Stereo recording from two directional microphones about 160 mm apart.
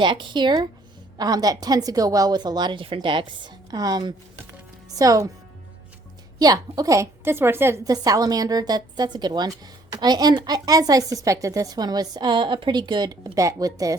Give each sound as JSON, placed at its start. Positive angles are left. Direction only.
{"t": 0.0, "sound": "a woman's voice", "side_deg": -30}
{"t": 6.4, "sound": "a woman's voice", "side_deg": -25}